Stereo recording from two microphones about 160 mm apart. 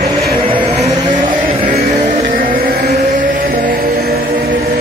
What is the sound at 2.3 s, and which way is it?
Vehicle, 60° right (ahead or behind).